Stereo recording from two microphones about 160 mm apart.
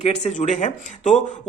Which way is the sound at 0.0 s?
40° left (ahead or behind).